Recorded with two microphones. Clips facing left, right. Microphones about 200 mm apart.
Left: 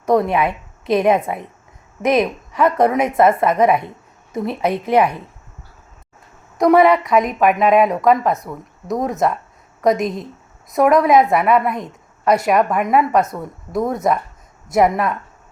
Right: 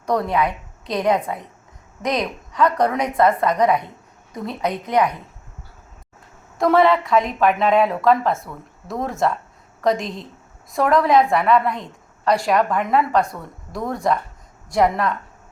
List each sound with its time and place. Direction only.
0.0 s a woman's voice: 20° left (ahead or behind)
6.6 s a woman's voice: 20° left (ahead or behind)